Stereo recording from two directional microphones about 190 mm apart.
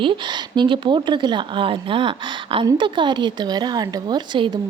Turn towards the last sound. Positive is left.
turn(degrees=-25)  # may be behind; listen again after turning